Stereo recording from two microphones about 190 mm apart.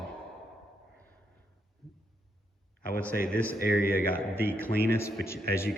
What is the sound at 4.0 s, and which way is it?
Speech, 10° left (ahead or behind).